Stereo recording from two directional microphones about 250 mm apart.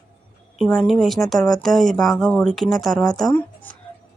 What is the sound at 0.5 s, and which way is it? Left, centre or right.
Speech, centre.